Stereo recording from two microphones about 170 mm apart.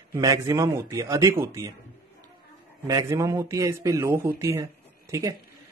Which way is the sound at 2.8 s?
20° right (ahead or behind).